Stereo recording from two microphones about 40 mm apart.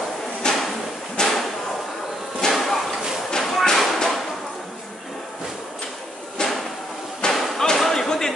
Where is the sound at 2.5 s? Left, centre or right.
Centre.